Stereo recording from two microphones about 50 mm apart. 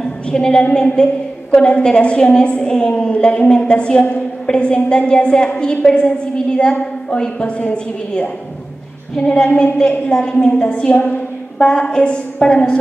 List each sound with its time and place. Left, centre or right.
0.0 s a woman's voice: centre
9.2 s a sound: centre
10.4 s a woman's voice: left